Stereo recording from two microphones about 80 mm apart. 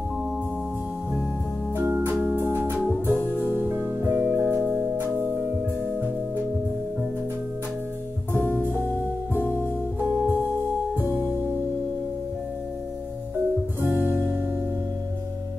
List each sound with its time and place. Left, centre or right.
1.8 s organ: right
2.2 s music: right
2.9 s music: left
3.3 s music: right
4.6 s organ: centre
4.8 s music: right
8.5 s music: right
13.7 s music: right